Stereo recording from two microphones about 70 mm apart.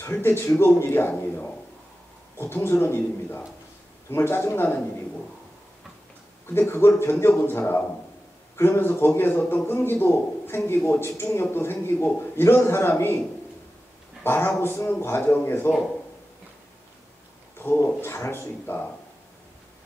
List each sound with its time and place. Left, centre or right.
0.0 s a man's voice: left
6.6 s a man's voice: left
14.2 s a man's voice: left
17.6 s a man's voice: left